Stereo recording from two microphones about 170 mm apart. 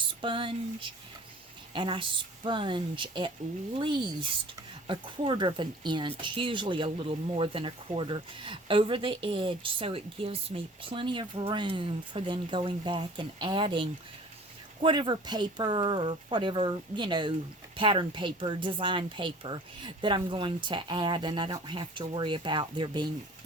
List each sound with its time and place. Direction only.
0.1 s speech: 30° right (ahead or behind)